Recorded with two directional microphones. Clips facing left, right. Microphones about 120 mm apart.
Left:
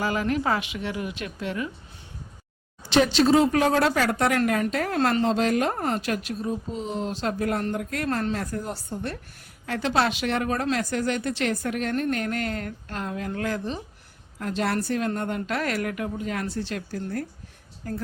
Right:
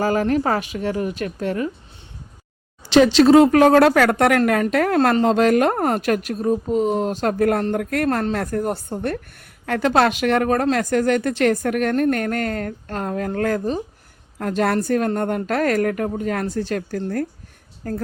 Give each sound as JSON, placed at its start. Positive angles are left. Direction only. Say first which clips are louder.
{"t": 0.0, "sound": "a woman's voice", "louder": "right 6 dB", "side_deg": -40}
{"t": 2.9, "sound": "speech", "louder": "right 7 dB", "side_deg": -90}
{"t": 4.9, "sound": "a woman's voice", "louder": "right 5 dB", "side_deg": -45}